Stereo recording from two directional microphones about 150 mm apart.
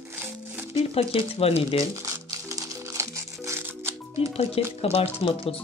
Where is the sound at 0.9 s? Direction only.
40° left (ahead or behind).